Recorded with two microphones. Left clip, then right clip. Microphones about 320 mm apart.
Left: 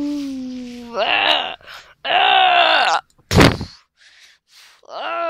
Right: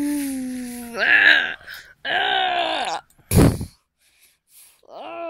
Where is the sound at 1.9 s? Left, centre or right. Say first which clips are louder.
Left 7 dB; left.